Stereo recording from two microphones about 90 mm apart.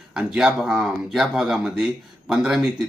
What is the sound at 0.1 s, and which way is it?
Speech, 5° right (ahead or behind).